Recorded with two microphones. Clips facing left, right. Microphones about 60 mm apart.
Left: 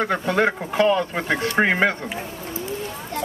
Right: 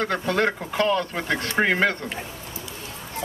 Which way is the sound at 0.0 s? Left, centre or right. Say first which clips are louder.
Left 2 dB; centre.